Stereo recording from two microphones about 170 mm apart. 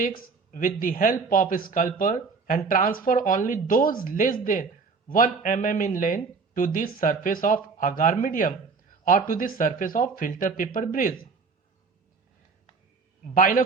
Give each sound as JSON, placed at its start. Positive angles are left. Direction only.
{"t": 0.5, "sound": "speech", "side_deg": 55}
{"t": 13.3, "sound": "speech", "side_deg": 50}